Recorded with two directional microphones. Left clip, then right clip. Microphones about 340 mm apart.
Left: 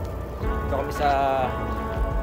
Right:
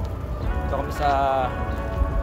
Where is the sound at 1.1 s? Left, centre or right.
Centre.